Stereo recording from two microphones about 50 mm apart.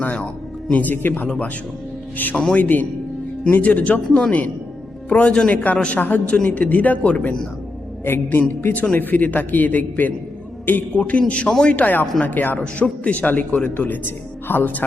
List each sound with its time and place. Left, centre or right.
0.0 s a man's voice: left
2.3 s speech: centre
2.6 s a man's voice: left
5.7 s speech: left
6.0 s a man's voice: left
6.2 s speech: left
8.0 s a man's voice: left
11.4 s a man's voice: centre
11.8 s a man's voice: left